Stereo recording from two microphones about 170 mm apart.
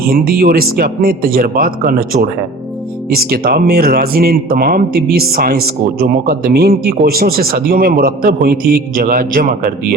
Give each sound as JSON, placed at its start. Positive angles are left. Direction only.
{"t": 0.1, "sound": "speech", "side_deg": -60}